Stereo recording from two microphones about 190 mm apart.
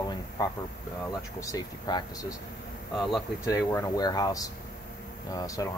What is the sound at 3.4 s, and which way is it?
Speech, 15° left (ahead or behind).